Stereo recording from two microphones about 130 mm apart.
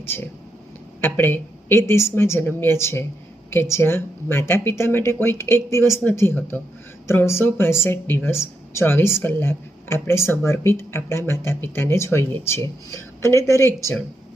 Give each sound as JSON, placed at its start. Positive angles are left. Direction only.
{"t": 0.0, "sound": "a woman's voice", "side_deg": 15}